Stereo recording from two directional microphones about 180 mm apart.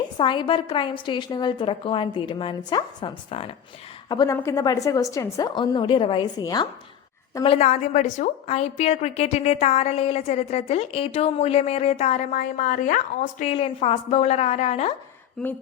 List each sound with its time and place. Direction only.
0.2 s a woman's voice: 25° left (ahead or behind)
4.1 s a woman's voice: 20° left (ahead or behind)
7.4 s a woman's voice: 35° left (ahead or behind)
13.4 s a woman's voice: 35° left (ahead or behind)
15.4 s speech: centre (ahead or behind)